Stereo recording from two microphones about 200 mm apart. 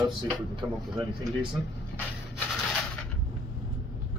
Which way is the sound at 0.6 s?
25° right (ahead or behind).